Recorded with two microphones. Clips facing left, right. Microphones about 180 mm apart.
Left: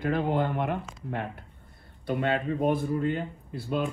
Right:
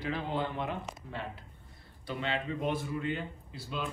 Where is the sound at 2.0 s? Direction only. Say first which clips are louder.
Left 7 dB; 55° left (ahead or behind).